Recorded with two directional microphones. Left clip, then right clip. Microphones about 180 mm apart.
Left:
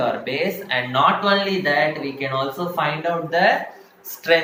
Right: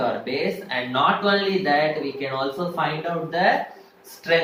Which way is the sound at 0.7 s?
30° left (ahead or behind).